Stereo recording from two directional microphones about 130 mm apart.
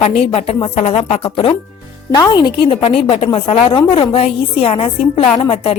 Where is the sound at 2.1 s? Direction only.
30° left (ahead or behind).